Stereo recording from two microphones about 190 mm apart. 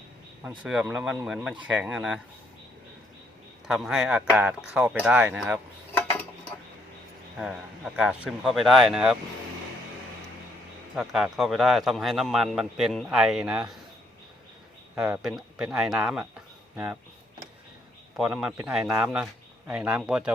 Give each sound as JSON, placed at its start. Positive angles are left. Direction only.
{"t": 0.6, "sound": "a man's voice", "side_deg": -5}
{"t": 3.7, "sound": "a man's voice", "side_deg": 0}
{"t": 7.3, "sound": "a man's voice", "side_deg": 0}
{"t": 10.9, "sound": "a man's voice", "side_deg": 0}
{"t": 14.9, "sound": "a man's voice", "side_deg": -5}
{"t": 18.2, "sound": "a man's voice", "side_deg": -5}